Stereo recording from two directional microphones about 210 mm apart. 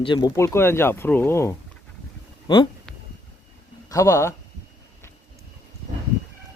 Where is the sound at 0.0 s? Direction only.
20° left (ahead or behind).